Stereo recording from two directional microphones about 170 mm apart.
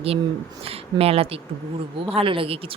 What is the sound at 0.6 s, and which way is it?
Speech, 35° right (ahead or behind).